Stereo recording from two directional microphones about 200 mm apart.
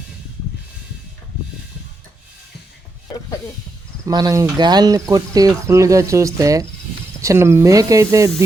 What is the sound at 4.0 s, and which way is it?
Speech, 20° right (ahead or behind).